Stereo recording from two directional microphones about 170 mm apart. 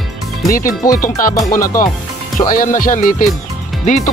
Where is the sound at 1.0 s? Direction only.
55° left (ahead or behind).